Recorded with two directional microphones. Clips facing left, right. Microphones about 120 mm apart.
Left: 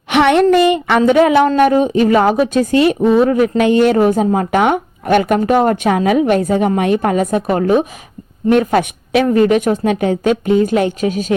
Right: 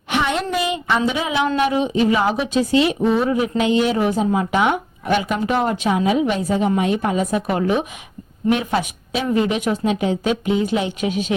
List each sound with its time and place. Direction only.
0.1 s a sound: 70° left (ahead or behind); by 1.5 s 55° left (ahead or behind)
1.5 s a woman's voice: 50° left (ahead or behind)
8.4 s a woman's voice: 50° left (ahead or behind)